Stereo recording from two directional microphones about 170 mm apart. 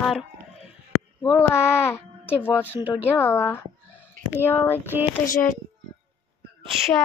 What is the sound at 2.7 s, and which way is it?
Speech, 10° right (ahead or behind).